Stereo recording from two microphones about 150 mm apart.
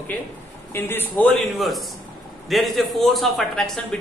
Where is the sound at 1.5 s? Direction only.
Centre (ahead or behind).